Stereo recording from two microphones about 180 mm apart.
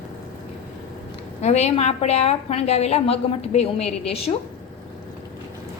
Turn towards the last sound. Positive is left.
turn(degrees=35)  # may be behind; listen again after turning